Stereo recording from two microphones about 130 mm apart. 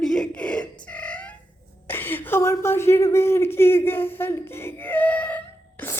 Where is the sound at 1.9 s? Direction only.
15° left (ahead or behind).